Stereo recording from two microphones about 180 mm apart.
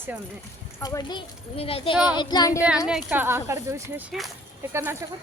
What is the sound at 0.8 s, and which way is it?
Speech, 20° left (ahead or behind).